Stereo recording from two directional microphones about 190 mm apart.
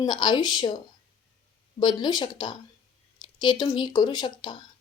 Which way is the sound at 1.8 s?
20° left (ahead or behind).